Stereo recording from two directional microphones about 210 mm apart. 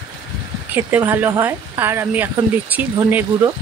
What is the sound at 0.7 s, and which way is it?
Speech, 10° right (ahead or behind).